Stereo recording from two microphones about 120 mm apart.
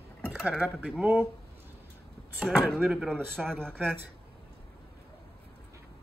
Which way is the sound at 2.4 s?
Centre (ahead or behind).